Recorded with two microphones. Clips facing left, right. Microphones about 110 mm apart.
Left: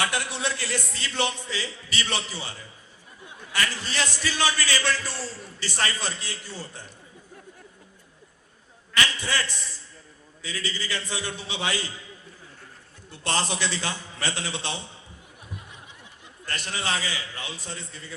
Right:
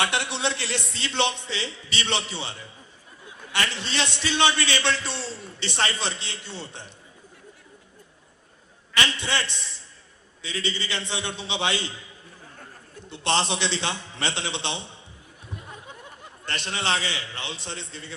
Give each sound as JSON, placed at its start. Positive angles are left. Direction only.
{"t": 0.1, "sound": "a man's voice", "side_deg": -25}
{"t": 3.8, "sound": "a man's voice", "side_deg": -25}
{"t": 9.1, "sound": "a man's voice", "side_deg": -25}
{"t": 13.2, "sound": "a man's voice", "side_deg": -25}
{"t": 15.9, "sound": "a sound", "side_deg": -50}
{"t": 16.5, "sound": "a man's voice", "side_deg": -25}
{"t": 17.7, "sound": "a man's voice", "side_deg": -70}